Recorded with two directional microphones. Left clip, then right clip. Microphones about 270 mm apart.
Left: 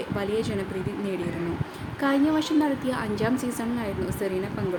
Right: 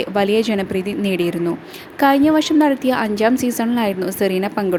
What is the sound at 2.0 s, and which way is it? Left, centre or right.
A woman's voice, right.